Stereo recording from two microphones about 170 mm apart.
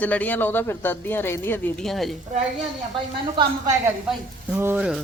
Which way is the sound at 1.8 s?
Centre (ahead or behind).